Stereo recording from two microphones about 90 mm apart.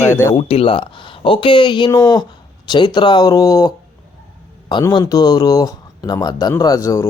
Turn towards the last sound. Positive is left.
turn(degrees=35)  # may be behind; listen again after turning